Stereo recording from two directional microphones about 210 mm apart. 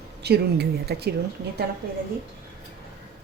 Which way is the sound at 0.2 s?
50° right (ahead or behind).